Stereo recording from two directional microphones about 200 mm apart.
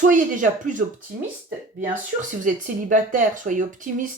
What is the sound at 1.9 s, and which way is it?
Speech, 40° right (ahead or behind).